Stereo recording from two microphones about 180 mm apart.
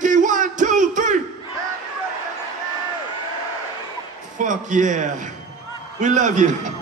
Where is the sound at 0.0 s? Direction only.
45° right (ahead or behind).